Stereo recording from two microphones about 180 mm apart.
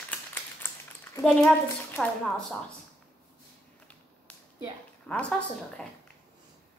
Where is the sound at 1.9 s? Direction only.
5° left (ahead or behind).